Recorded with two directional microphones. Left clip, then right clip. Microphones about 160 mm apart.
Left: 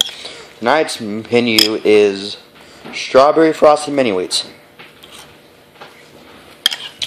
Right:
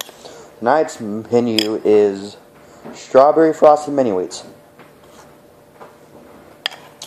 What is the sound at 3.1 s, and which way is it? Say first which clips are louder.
Speech: left 1 dB; 25° left (ahead or behind).